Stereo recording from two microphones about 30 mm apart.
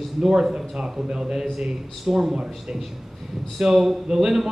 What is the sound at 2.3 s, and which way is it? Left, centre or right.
Speech, right.